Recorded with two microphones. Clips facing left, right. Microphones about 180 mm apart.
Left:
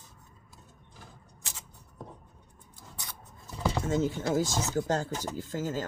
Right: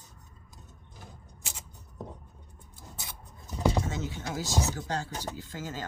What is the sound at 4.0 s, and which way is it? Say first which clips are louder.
Speech: left 8 dB; 50° left (ahead or behind).